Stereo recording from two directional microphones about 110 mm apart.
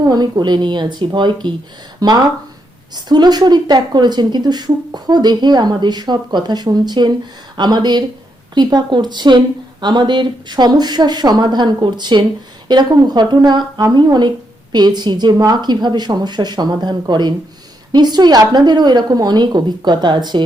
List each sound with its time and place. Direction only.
0.0 s a woman's voice: 40° right (ahead or behind)